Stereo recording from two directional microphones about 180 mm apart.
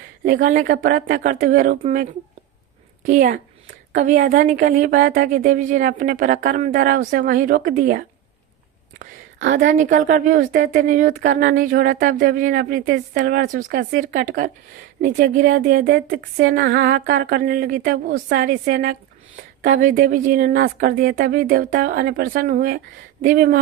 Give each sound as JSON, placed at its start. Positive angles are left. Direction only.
{"t": 0.5, "sound": "a woman's voice", "side_deg": -50}
{"t": 3.1, "sound": "a woman's voice", "side_deg": -45}
{"t": 4.2, "sound": "a woman's voice", "side_deg": -60}
{"t": 4.4, "sound": "a woman's voice", "side_deg": -45}
{"t": 9.7, "sound": "a woman's voice", "side_deg": -45}
{"t": 13.1, "sound": "a woman's voice", "side_deg": -60}